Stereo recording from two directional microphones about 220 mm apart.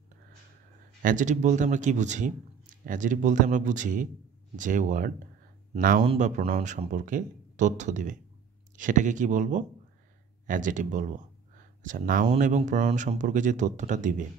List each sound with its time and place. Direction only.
1.0 s speech: 35° right (ahead or behind)